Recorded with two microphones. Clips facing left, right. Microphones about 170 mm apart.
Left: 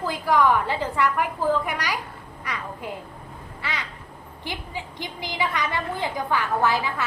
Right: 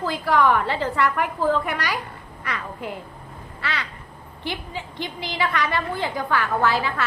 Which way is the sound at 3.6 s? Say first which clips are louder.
Right 3 dB; 15° left (ahead or behind).